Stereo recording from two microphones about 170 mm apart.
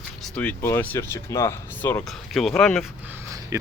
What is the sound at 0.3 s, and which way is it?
Speech, 10° left (ahead or behind).